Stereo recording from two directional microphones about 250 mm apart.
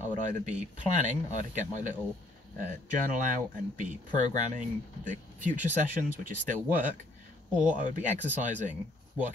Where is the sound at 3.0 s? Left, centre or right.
Right.